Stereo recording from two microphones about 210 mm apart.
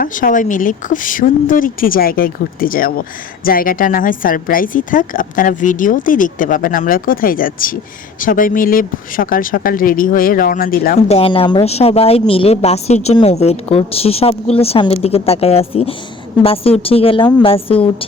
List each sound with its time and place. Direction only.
0.0 s a woman's voice: 40° left (ahead or behind)
11.1 s a woman's voice: 25° left (ahead or behind)